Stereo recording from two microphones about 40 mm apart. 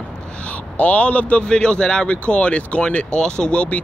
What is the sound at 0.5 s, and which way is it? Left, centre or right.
Speech, left.